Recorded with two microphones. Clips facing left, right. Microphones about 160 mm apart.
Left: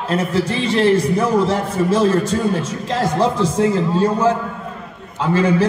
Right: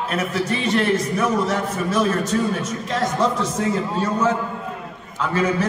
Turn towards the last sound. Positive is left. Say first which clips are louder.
# left 5 dB
turn(degrees=30)  # may be behind; listen again after turning